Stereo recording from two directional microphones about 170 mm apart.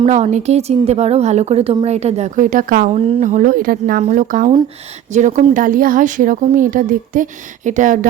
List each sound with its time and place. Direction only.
0.0 s a woman's voice: 40° right (ahead or behind)